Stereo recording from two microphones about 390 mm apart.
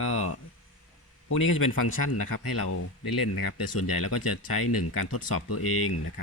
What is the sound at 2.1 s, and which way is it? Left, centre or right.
Speech, left.